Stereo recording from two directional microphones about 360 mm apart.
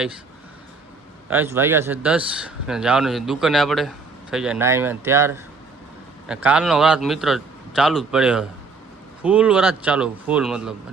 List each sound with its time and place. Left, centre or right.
1.3 s a man's voice: centre